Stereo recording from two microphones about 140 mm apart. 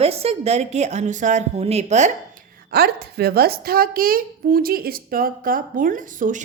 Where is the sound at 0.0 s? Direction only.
45° right (ahead or behind).